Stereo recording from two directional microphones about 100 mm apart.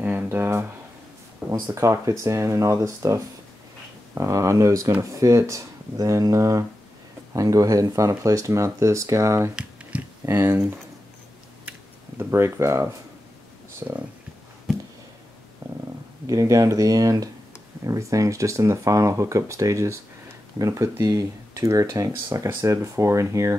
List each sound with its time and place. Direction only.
0.0 s a sound: 20° right (ahead or behind)
1.7 s speech: 30° right (ahead or behind)
12.2 s speech: 25° right (ahead or behind)
15.6 s stomach rumble: 30° right (ahead or behind)
16.3 s speech: 35° right (ahead or behind)